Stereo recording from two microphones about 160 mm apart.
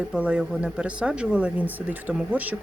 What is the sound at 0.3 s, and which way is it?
Speech, 5° right (ahead or behind).